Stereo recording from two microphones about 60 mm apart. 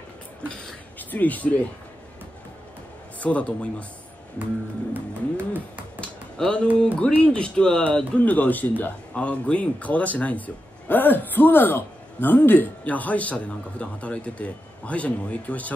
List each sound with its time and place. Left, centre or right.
0.9 s speech: left
3.2 s a man's voice: left
4.9 s music: right
6.3 s a man's voice: centre; by 8.9 s left
9.1 s a man's voice: centre